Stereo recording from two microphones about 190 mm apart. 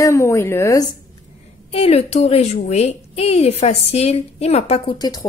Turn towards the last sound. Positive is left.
turn(degrees=25)  # may be behind; listen again after turning